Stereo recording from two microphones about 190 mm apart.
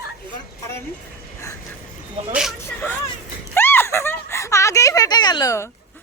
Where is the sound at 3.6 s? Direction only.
10° left (ahead or behind).